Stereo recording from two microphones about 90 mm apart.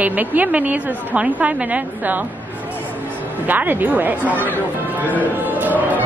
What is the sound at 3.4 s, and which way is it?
Speech, 20° right (ahead or behind).